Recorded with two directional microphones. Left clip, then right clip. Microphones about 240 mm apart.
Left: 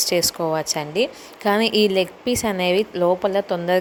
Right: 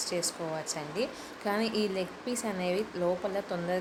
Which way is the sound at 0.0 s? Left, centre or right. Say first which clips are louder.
Left 13 dB; left.